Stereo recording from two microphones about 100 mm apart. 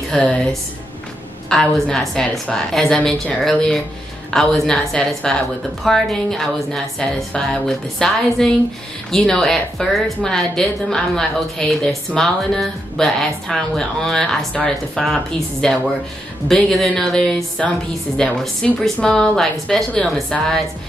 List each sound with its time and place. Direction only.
0.1 s a woman's voice: 5° left (ahead or behind)